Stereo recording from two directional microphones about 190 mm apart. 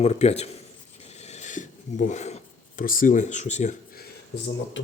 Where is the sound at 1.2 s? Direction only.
35° left (ahead or behind).